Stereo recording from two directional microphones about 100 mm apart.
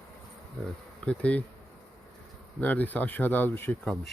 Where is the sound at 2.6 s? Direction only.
15° left (ahead or behind).